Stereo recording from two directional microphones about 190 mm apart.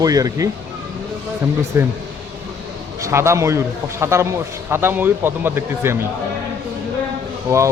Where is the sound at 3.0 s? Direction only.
15° right (ahead or behind).